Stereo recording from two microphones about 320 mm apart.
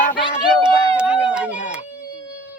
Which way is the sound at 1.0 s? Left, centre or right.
Centre.